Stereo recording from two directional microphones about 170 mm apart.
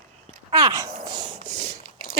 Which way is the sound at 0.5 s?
20° right (ahead or behind).